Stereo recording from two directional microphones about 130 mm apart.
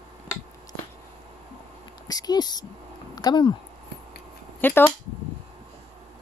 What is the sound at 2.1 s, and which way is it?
Speech, 30° left (ahead or behind).